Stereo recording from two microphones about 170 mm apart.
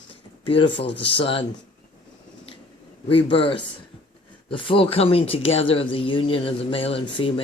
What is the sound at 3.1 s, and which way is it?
Speech, 30° left (ahead or behind).